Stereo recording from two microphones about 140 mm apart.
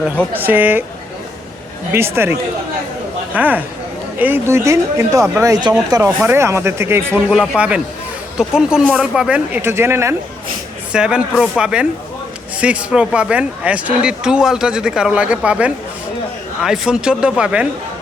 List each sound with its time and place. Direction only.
0.3 s speech: 15° right (ahead or behind)
2.1 s speech: 15° right (ahead or behind)
7.3 s speech: 5° right (ahead or behind)
10.9 s speech: 5° right (ahead or behind)